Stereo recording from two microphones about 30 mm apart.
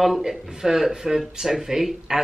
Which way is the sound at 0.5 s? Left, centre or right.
Centre.